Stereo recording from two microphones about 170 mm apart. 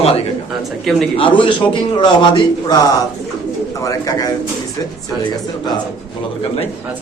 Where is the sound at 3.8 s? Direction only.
20° left (ahead or behind).